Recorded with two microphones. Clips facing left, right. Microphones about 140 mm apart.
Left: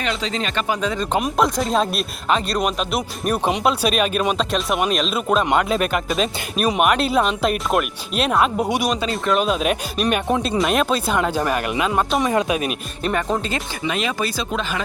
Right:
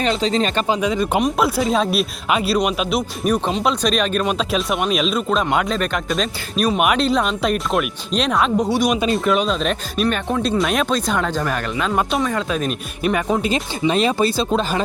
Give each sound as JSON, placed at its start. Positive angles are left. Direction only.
{"t": 0.0, "sound": "speech", "side_deg": -35}
{"t": 0.8, "sound": "speech", "side_deg": -10}
{"t": 10.6, "sound": "speech", "side_deg": 0}
{"t": 13.0, "sound": "speech", "side_deg": -5}
{"t": 13.5, "sound": "speech", "side_deg": -30}